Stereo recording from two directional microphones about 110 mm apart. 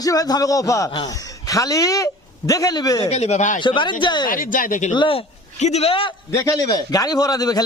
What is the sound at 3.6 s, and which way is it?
Speech, 45° left (ahead or behind).